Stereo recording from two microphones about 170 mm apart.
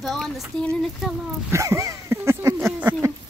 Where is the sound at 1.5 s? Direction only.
15° right (ahead or behind).